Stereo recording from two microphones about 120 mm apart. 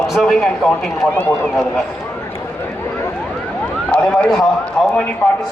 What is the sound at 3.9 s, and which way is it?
Speech, 10° left (ahead or behind).